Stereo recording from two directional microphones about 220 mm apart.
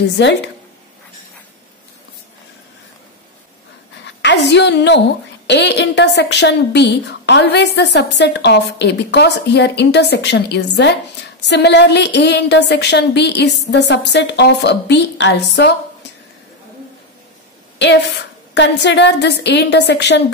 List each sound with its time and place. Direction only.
0.0 s a woman's voice: 50° left (ahead or behind)
4.0 s a sound: 55° left (ahead or behind)
5.5 s a woman's voice: 50° left (ahead or behind)
17.7 s a woman's voice: 50° left (ahead or behind)